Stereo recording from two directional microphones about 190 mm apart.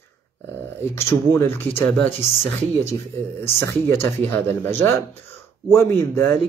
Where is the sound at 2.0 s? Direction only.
30° left (ahead or behind).